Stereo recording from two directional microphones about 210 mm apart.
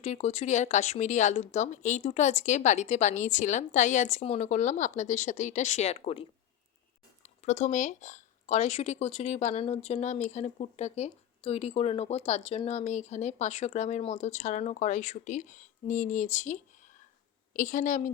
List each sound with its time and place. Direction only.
0.0 s speech: 30° left (ahead or behind)